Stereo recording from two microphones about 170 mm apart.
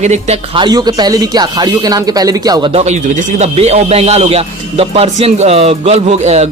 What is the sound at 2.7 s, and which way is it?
A man's voice, 45° right (ahead or behind).